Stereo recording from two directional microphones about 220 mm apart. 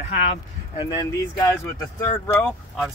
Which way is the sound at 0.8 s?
15° left (ahead or behind).